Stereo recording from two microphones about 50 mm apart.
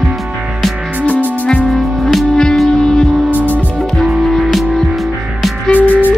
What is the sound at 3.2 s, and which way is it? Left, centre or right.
Music, right.